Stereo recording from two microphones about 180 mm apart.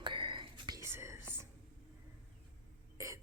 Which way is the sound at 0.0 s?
25° right (ahead or behind).